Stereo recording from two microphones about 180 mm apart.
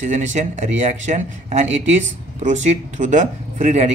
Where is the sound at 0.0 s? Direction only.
40° right (ahead or behind).